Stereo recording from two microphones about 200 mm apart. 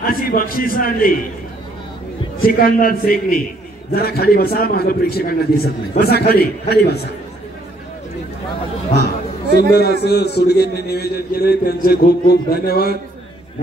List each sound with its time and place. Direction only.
0.0 s a man's voice: 45° left (ahead or behind)
2.4 s a man's voice: 45° left (ahead or behind)
9.5 s a man's voice: 50° right (ahead or behind)
10.0 s a man's voice: 55° left (ahead or behind)